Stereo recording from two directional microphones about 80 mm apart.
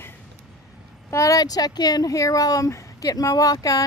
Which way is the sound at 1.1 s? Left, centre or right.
Left.